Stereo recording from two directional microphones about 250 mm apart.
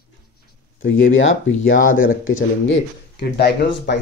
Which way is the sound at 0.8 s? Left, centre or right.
Left.